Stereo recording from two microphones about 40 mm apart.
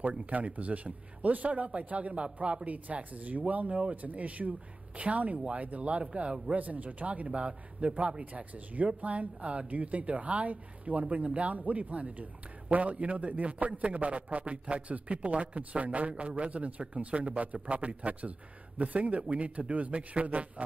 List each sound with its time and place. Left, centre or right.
0.3 s speech: right
7.2 s speech: right